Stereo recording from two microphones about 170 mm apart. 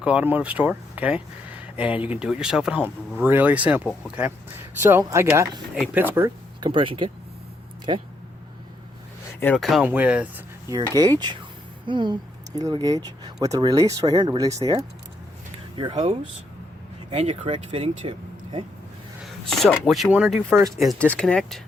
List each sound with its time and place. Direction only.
0.0 s speech: 5° right (ahead or behind)
5.7 s speech: centre (ahead or behind)
6.0 s speech: 10° right (ahead or behind)
6.6 s speech: 30° right (ahead or behind)
9.4 s speech: 5° left (ahead or behind)
9.8 s speech: 10° right (ahead or behind)
10.9 s speech: 20° right (ahead or behind)
15.7 s speech: 30° right (ahead or behind)
19.2 s a sound: centre (ahead or behind)
19.9 s speech: 5° right (ahead or behind)
20.6 s speech: 15° right (ahead or behind)
20.8 s speech: 5° left (ahead or behind)